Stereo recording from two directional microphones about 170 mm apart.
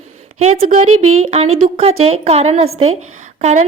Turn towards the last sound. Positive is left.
turn(degrees=-45)  # may be behind; listen again after turning